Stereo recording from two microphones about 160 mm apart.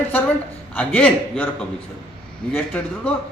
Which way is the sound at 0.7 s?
10° left (ahead or behind).